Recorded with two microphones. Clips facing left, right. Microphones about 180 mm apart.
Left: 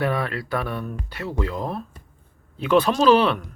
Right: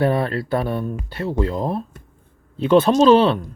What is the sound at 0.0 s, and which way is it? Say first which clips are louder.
Speech: right 5 dB; 30° right (ahead or behind).